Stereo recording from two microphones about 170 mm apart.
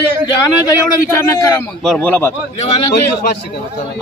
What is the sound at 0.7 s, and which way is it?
A man's voice, 20° left (ahead or behind).